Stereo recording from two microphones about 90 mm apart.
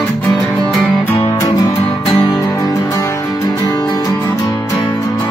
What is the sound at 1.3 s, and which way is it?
Music, 35° left (ahead or behind).